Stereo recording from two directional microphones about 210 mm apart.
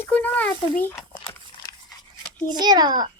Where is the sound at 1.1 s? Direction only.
20° left (ahead or behind).